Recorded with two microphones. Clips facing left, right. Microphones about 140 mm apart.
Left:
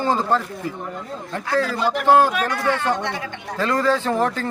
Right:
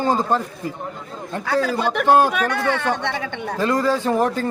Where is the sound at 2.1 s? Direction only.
15° right (ahead or behind).